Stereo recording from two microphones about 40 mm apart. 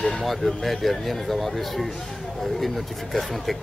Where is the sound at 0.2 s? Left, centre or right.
Centre.